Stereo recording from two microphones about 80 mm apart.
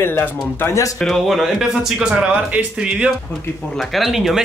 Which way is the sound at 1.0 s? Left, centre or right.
Centre.